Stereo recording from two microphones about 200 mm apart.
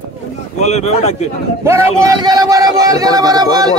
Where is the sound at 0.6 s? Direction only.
35° left (ahead or behind).